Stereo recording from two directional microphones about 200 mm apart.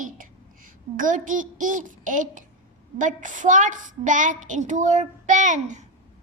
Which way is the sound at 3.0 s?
40° right (ahead or behind).